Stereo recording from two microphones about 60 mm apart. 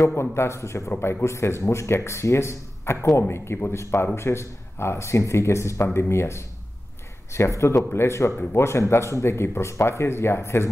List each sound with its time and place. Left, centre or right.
0.1 s speech: left